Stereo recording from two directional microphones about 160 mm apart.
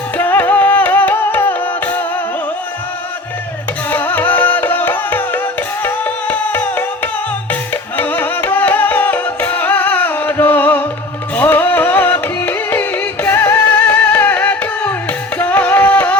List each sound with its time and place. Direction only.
0.2 s music: 10° left (ahead or behind)
3.8 s music: 10° left (ahead or behind)